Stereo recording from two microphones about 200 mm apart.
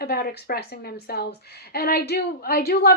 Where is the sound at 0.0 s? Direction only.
50° left (ahead or behind).